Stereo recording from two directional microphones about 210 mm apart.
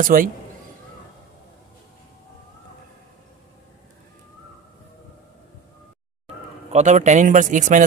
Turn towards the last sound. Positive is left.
turn(degrees=-35)  # may be behind; listen again after turning